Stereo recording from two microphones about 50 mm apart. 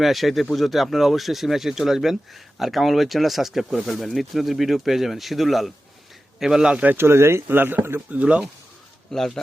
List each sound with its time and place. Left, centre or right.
0.0 s speech: centre
6.4 s a man's voice: centre
6.9 s speech: right
7.4 s speech: right
8.1 s speech: right
9.1 s speech: centre